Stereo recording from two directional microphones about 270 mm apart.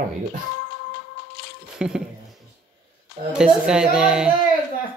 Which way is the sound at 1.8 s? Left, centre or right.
Centre.